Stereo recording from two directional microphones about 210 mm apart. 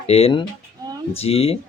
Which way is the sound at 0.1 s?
25° left (ahead or behind).